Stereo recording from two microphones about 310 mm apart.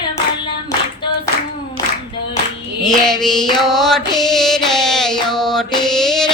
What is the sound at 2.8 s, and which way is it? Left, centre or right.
Mantra, centre.